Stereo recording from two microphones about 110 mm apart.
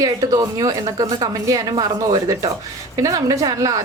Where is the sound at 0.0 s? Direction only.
30° right (ahead or behind).